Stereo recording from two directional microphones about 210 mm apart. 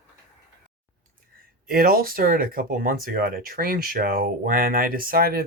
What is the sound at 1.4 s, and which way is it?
Speech, 45° right (ahead or behind).